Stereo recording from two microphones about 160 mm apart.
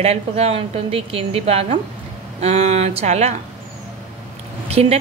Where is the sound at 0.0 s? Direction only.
40° right (ahead or behind).